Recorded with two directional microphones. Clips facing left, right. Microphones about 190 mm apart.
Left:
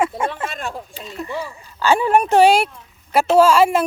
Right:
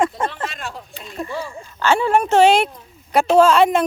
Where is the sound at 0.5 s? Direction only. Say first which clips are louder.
Left 4 dB; 50° left (ahead or behind).